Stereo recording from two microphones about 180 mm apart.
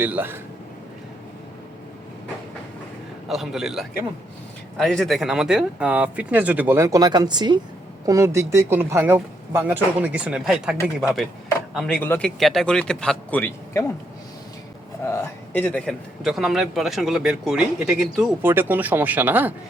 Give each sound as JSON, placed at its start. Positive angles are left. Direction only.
{"t": 0.0, "sound": "speech", "side_deg": -10}
{"t": 3.2, "sound": "a man's voice", "side_deg": 0}
{"t": 15.0, "sound": "a man's voice", "side_deg": 15}